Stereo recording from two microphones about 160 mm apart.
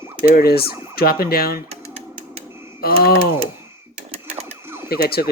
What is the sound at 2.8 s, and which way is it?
Speech, 70° left (ahead or behind).